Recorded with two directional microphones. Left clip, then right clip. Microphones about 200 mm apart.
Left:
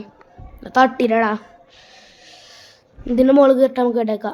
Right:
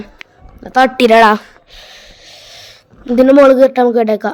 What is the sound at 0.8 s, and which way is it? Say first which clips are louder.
Speech: right 10 dB; 50° right (ahead or behind).